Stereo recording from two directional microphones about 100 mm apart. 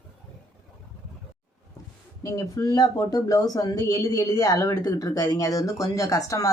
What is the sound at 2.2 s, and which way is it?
Speech, 35° left (ahead or behind).